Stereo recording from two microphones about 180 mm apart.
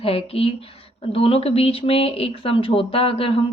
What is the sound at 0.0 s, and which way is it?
Speech, 35° left (ahead or behind).